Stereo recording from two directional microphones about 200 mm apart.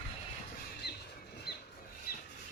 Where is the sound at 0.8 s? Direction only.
55° left (ahead or behind).